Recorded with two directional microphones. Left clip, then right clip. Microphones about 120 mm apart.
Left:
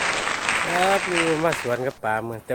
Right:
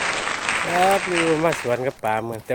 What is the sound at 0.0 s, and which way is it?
Speech, centre (ahead or behind).